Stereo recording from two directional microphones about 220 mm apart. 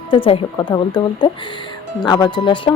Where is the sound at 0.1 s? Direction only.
20° left (ahead or behind).